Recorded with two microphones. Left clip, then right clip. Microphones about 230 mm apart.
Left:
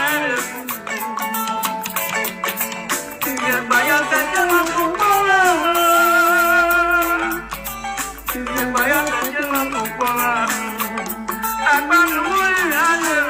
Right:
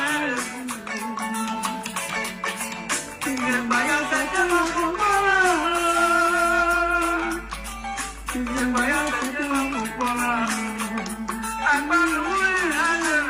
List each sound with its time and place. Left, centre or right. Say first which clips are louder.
0.0 s music: left 5 dB; left
2.9 s music: left 3 dB; left
8.5 s music: left 5 dB; left